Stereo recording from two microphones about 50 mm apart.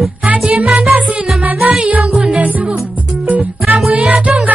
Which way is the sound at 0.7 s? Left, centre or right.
Right.